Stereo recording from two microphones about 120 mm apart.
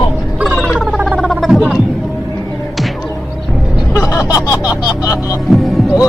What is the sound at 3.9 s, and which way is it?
Music, 25° left (ahead or behind).